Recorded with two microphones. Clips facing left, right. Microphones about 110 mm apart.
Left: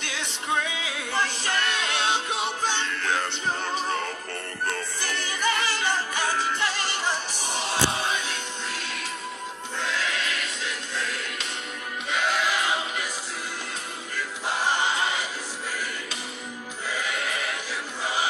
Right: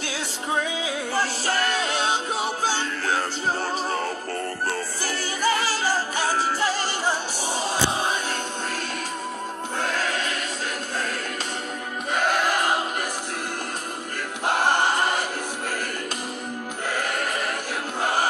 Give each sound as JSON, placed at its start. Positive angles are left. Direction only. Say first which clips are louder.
{"t": 0.7, "sound": "music", "louder": "right 3 dB", "side_deg": -35}
{"t": 9.8, "sound": "music", "louder": "right 2 dB", "side_deg": -45}
{"t": 12.1, "sound": "music", "louder": "right 3 dB", "side_deg": -50}
{"t": 14.1, "sound": "choir", "louder": "right 5 dB", "side_deg": -55}
{"t": 16.8, "sound": "music", "louder": "right 3 dB", "side_deg": -55}